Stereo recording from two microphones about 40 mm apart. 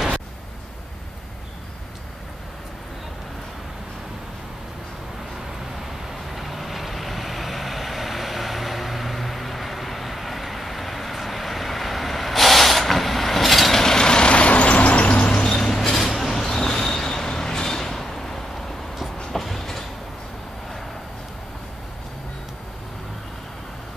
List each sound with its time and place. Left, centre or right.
6.3 s vehicle: centre; by 15.4 s left
15.4 s a sound: centre
19.3 s train: centre